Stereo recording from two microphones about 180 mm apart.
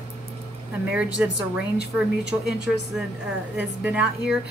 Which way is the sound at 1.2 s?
10° right (ahead or behind).